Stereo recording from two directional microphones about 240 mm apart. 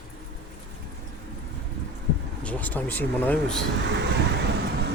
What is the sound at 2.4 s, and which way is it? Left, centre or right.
Speech, centre.